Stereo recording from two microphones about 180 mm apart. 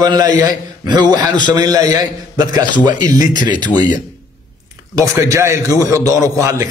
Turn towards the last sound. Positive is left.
turn(degrees=-20)  # may be behind; listen again after turning